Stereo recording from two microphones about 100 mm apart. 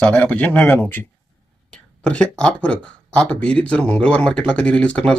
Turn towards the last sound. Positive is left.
turn(degrees=10)  # may be behind; listen again after turning